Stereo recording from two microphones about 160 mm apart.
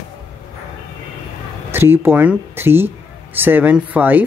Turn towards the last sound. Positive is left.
turn(degrees=-10)  # may be behind; listen again after turning